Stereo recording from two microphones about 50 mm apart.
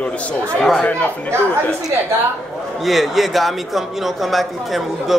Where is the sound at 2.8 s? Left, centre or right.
Centre.